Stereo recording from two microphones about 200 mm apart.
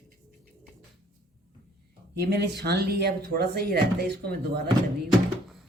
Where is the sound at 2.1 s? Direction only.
55° right (ahead or behind).